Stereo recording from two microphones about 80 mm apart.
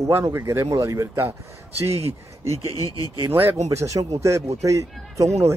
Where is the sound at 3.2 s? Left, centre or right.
Right.